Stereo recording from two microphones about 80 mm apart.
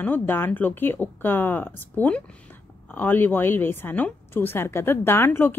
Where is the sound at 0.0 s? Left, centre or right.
Left.